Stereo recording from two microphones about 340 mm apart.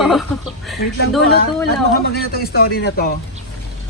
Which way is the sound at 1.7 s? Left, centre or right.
Left.